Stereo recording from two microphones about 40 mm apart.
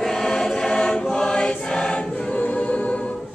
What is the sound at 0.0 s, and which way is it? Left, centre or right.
Choir, centre.